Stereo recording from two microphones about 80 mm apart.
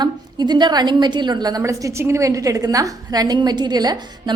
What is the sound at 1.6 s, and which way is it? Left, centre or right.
A woman's voice, right.